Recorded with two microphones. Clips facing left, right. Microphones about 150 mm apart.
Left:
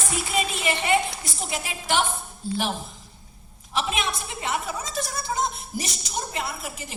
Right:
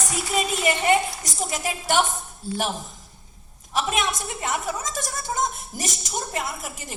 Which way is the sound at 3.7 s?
45° right (ahead or behind).